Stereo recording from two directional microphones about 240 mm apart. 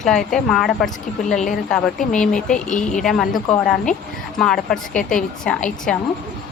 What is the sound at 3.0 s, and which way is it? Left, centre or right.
Speech, centre.